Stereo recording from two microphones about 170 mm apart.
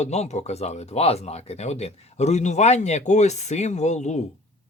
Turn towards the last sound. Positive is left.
turn(degrees=40)  # may be behind; listen again after turning